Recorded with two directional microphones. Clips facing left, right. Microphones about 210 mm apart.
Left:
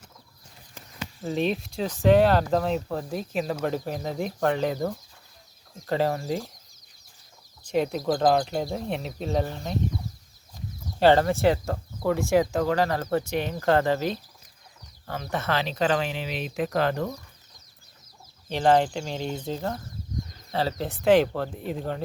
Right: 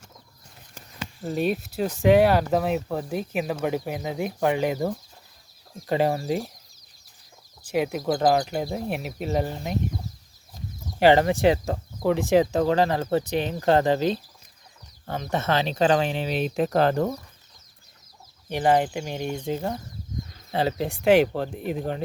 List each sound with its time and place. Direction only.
1.2 s speech: 5° right (ahead or behind)
7.6 s speech: 5° right (ahead or behind)
11.0 s speech: 15° right (ahead or behind); by 17.1 s 35° right (ahead or behind)
18.4 s speech: 10° right (ahead or behind)